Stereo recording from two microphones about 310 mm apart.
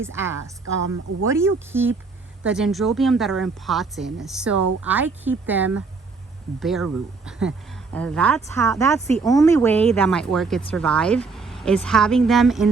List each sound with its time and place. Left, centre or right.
0.0 s speech: centre
0.6 s speech: right
1.3 s speech: centre